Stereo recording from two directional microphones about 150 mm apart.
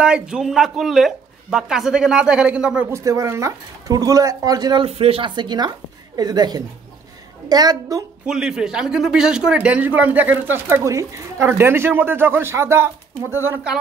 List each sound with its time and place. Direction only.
0.0 s speech: 5° right (ahead or behind)
2.9 s speech: 20° right (ahead or behind)
4.8 s speech: 40° right (ahead or behind); by 8.0 s 25° right (ahead or behind)
8.3 s speech: 5° right (ahead or behind)